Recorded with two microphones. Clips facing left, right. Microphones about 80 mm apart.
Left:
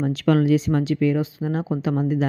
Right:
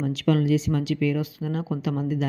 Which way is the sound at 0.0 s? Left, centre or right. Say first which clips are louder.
Left 4 dB; left.